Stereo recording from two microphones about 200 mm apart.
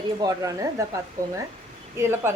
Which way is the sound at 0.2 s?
15° right (ahead or behind).